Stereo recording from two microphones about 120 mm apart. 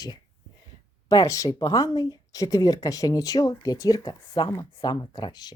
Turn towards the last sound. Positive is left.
turn(degrees=35)  # may be behind; listen again after turning